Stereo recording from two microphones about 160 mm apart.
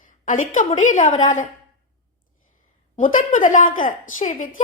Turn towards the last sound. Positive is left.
turn(degrees=55)  # may be behind; listen again after turning